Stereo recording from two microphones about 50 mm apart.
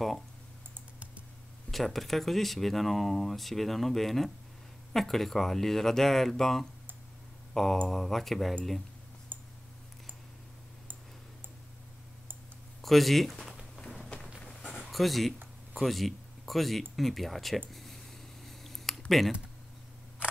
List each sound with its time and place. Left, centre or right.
1.7 s speech: centre
9.3 s clicking: right
12.8 s speech: centre
14.4 s a sound: centre
14.8 s speech: centre
17.6 s a sound: centre